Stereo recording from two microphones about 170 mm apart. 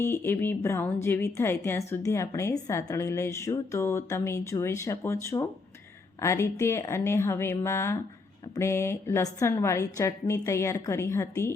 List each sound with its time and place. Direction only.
0.0 s speech: 15° left (ahead or behind)